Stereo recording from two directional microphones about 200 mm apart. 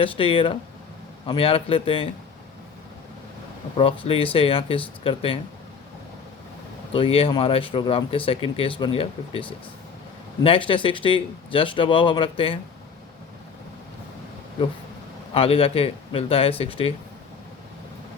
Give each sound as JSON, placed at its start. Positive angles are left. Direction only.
{"t": 0.0, "sound": "speech", "side_deg": 25}
{"t": 3.8, "sound": "speech", "side_deg": 25}
{"t": 6.9, "sound": "speech", "side_deg": 25}
{"t": 15.3, "sound": "speech", "side_deg": 30}